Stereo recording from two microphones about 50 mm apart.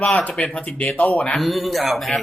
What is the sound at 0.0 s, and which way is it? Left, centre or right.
Speech, left.